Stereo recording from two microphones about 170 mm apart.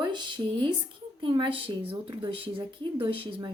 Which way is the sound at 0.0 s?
25° right (ahead or behind).